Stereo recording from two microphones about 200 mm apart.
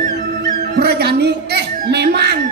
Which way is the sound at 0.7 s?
55° right (ahead or behind).